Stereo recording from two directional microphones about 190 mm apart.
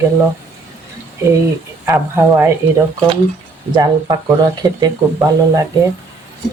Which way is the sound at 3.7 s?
20° right (ahead or behind).